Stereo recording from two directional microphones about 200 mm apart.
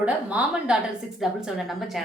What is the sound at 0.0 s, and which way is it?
A woman's voice, 5° right (ahead or behind).